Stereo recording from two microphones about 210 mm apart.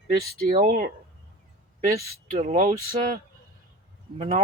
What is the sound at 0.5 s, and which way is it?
Speech, 45° right (ahead or behind).